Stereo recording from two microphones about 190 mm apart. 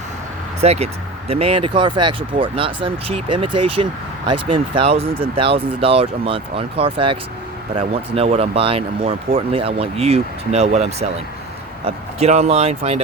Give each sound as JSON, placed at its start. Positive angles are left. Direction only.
{"t": 0.6, "sound": "speech", "side_deg": -35}